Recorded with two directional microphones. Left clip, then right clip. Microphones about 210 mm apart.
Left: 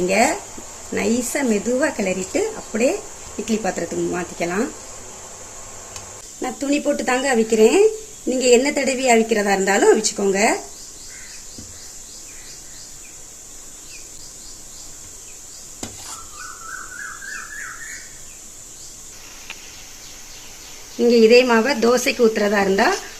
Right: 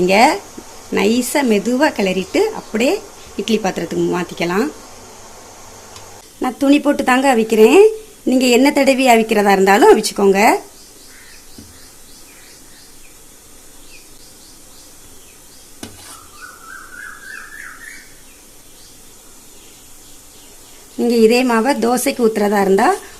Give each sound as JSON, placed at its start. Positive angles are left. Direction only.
{"t": 0.1, "sound": "a woman's voice", "side_deg": -40}
{"t": 6.4, "sound": "a woman's voice", "side_deg": -45}
{"t": 21.0, "sound": "a woman's voice", "side_deg": -55}